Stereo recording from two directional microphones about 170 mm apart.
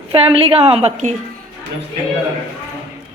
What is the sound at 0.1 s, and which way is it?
A woman's voice, 30° right (ahead or behind).